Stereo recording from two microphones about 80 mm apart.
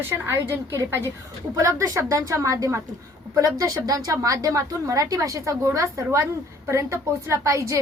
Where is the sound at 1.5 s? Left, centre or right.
Right.